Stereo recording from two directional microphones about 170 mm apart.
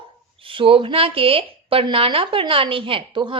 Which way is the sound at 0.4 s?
30° right (ahead or behind).